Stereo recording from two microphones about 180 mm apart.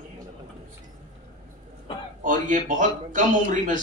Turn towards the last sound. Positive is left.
turn(degrees=-45)  # may be behind; listen again after turning